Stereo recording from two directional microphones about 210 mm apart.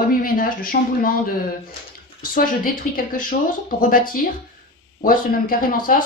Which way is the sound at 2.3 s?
40° left (ahead or behind).